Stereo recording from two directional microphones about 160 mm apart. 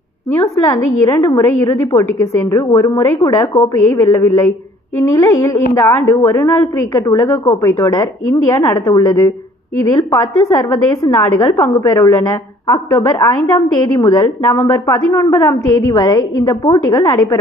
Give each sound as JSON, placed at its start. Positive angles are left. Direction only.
{"t": 0.3, "sound": "a woman's voice", "side_deg": 20}